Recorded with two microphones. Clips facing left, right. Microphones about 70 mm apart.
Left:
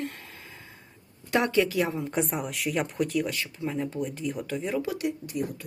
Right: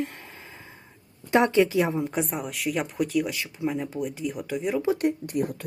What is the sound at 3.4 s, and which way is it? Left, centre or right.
Speech, centre.